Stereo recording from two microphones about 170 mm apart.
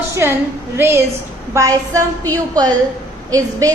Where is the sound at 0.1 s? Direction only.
15° right (ahead or behind).